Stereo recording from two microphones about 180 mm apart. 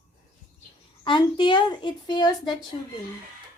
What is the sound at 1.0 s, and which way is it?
A woman's voice, 25° left (ahead or behind).